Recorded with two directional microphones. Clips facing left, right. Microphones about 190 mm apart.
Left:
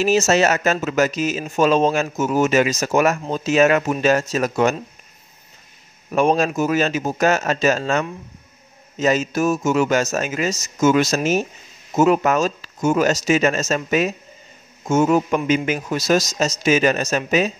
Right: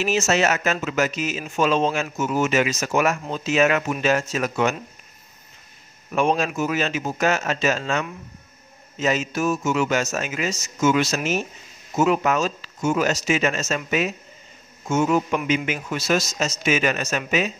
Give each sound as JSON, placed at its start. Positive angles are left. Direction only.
{"t": 0.0, "sound": "speech", "side_deg": 35}
{"t": 6.1, "sound": "speech", "side_deg": 40}